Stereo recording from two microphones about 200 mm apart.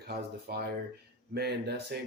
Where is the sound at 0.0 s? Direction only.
55° right (ahead or behind).